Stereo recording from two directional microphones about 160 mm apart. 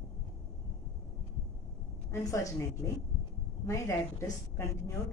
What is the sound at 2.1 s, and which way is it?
Speech, 20° left (ahead or behind).